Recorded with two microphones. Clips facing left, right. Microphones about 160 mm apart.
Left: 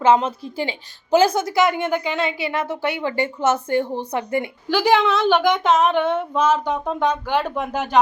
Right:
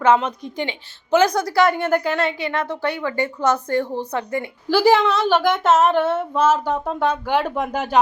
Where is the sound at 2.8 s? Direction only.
25° left (ahead or behind).